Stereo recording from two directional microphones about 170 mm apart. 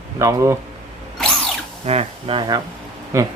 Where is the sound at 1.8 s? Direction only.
35° right (ahead or behind).